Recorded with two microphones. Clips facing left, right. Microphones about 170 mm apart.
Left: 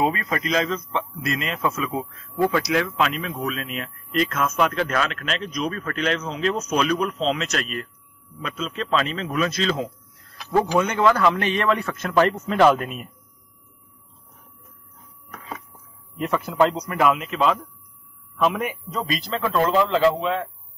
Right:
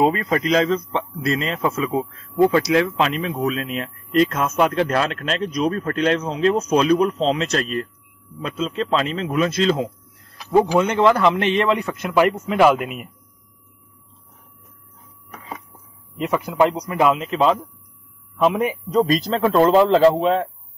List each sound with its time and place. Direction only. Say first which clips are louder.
0.0 s a man's voice: right 5 dB; 30° right (ahead or behind); by 13.1 s 15° right (ahead or behind)
16.2 s a man's voice: right 2 dB; 15° right (ahead or behind); by 20.4 s 35° right (ahead or behind)